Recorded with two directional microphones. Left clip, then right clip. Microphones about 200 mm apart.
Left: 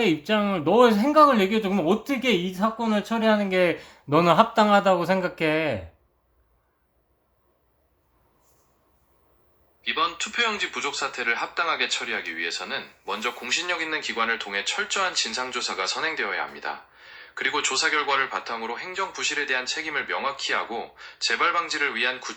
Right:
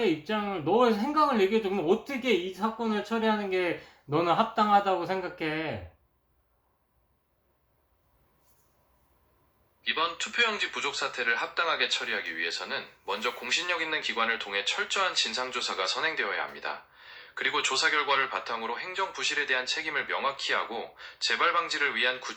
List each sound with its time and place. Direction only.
0.0 s speech: 55° left (ahead or behind)
9.8 s speech: 10° left (ahead or behind)